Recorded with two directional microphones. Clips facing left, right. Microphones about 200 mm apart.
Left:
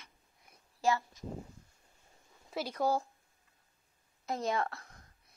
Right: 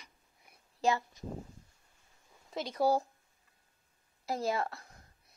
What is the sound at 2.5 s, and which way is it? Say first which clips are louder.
Speech: left 1 dB; 5° left (ahead or behind).